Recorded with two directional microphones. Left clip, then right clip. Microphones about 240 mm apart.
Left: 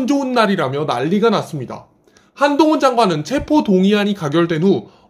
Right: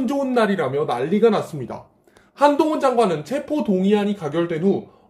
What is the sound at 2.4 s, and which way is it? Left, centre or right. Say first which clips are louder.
Speech: even; centre.